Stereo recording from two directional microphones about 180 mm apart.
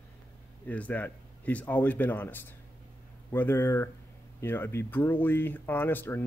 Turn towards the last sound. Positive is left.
turn(degrees=10)  # may be behind; listen again after turning